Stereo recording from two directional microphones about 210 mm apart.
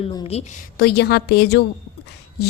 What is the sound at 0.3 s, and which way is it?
Speech, 30° left (ahead or behind).